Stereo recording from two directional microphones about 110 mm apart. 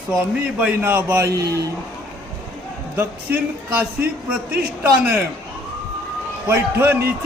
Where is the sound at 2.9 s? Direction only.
20° right (ahead or behind).